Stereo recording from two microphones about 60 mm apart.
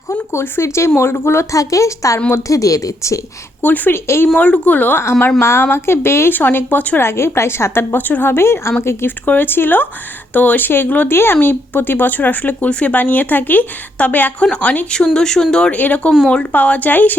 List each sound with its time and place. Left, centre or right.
0.1 s a woman's voice: left
1.5 s a woman's voice: left
3.6 s speech: left
3.9 s a woman's voice: left
4.4 s speech: left
5.4 s a woman's voice: left
7.0 s a woman's voice: left
9.0 s speech: left
11.1 s speech: left
14.9 s speech: centre
15.7 s speech: left